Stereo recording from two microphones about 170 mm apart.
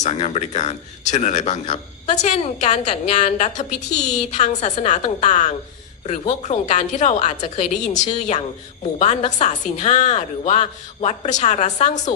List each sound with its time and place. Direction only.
0.0 s a woman's voice: 40° left (ahead or behind)